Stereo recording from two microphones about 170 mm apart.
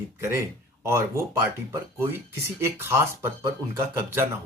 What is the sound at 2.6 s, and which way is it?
Speech, 15° right (ahead or behind).